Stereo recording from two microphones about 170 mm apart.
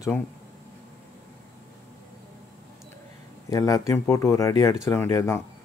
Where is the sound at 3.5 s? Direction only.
20° left (ahead or behind).